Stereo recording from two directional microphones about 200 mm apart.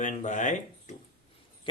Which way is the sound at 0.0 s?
35° left (ahead or behind).